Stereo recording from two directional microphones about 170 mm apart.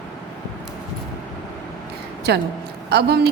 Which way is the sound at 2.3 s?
70° right (ahead or behind).